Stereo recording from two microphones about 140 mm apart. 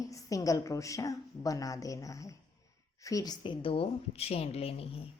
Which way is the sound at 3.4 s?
40° left (ahead or behind).